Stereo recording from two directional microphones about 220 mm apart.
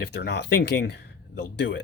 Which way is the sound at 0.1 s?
50° left (ahead or behind).